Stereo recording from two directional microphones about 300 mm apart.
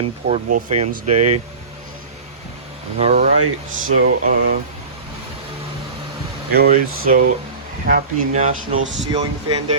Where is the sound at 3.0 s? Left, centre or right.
Right.